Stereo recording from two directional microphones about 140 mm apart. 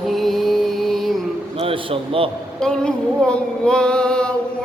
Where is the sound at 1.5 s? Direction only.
40° right (ahead or behind).